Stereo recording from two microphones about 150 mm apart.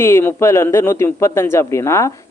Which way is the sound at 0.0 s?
15° left (ahead or behind).